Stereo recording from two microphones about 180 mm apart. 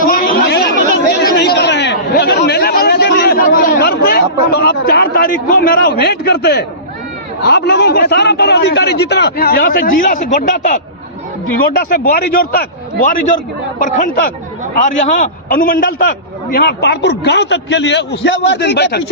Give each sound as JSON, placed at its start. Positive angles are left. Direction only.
{"t": 0.0, "sound": "chatter", "side_deg": 55}
{"t": 7.4, "sound": "a man's voice", "side_deg": 65}
{"t": 11.7, "sound": "a man's voice", "side_deg": 60}
{"t": 13.8, "sound": "a man's voice", "side_deg": 45}